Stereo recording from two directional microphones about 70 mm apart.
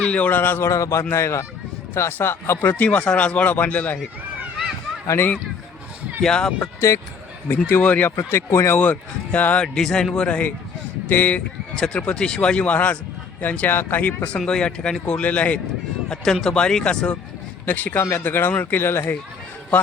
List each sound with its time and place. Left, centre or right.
0.0 s speech: centre
0.6 s a man's voice: left
5.1 s speech: left
6.2 s speech: centre
7.4 s speech: left
8.1 s speech: left
8.7 s speech: left
9.7 s speech: centre
11.7 s speech: centre
16.0 s speech: centre; by 19.1 s left